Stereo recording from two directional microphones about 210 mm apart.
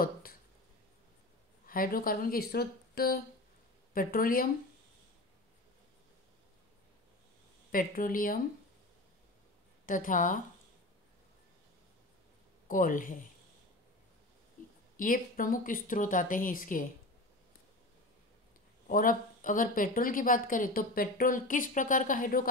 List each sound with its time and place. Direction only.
0.0 s a sound: 45° left (ahead or behind)
1.7 s speech: 45° left (ahead or behind)
7.7 s speech: 40° left (ahead or behind)
9.8 s speech: 40° left (ahead or behind)
12.6 s speech: 40° left (ahead or behind)
15.0 s speech: 40° left (ahead or behind)
18.9 s speech: 40° left (ahead or behind)